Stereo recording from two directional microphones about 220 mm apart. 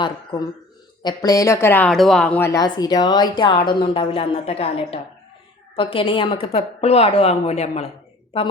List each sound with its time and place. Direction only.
0.0 s a woman's voice: 20° left (ahead or behind)